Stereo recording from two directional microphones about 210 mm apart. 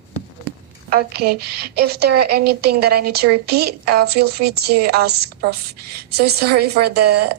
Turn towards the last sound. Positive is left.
turn(degrees=-50)  # may be behind; listen again after turning